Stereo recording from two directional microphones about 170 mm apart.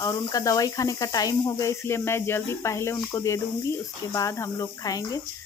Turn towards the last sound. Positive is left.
turn(degrees=20)  # may be behind; listen again after turning